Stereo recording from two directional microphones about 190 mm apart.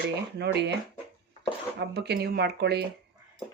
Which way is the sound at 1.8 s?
60° right (ahead or behind).